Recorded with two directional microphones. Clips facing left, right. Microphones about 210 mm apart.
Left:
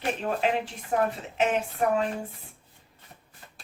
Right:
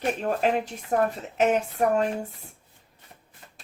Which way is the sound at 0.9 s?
40° right (ahead or behind).